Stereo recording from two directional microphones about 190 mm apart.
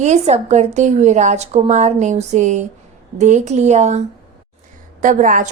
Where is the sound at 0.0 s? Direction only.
35° right (ahead or behind).